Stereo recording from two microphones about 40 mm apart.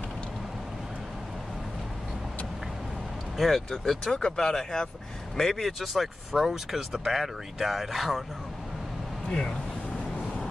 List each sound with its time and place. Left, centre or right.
3.3 s speech: centre
5.7 s speech: centre
9.3 s speech: left